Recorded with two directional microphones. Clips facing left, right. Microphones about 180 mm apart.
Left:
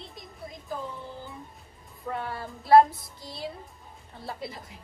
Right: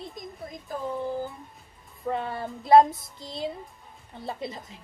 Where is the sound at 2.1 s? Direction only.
25° right (ahead or behind).